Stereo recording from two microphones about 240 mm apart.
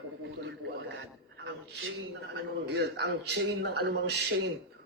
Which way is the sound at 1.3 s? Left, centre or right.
Right.